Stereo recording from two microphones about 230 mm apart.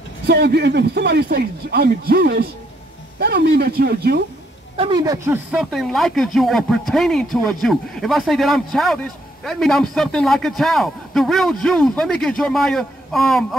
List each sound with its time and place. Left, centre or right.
0.3 s speech: right
4.7 s speech: right; by 13.6 s centre